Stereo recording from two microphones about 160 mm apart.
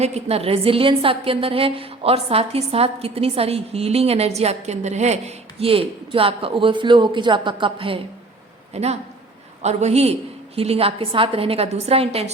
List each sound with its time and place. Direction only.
0.0 s a woman's voice: 40° right (ahead or behind)